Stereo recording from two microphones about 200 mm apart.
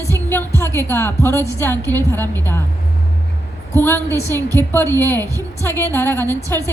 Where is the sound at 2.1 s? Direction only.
10° left (ahead or behind).